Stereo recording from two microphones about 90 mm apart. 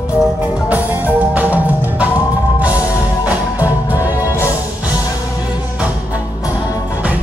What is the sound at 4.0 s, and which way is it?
Music, 30° left (ahead or behind).